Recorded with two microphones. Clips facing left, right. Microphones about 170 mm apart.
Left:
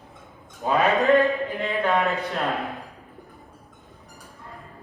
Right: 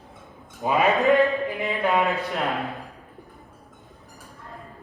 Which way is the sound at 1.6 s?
15° right (ahead or behind).